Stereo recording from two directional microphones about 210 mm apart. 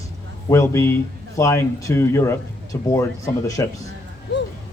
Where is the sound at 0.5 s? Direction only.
15° left (ahead or behind).